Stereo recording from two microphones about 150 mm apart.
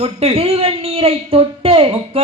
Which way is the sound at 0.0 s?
40° right (ahead or behind).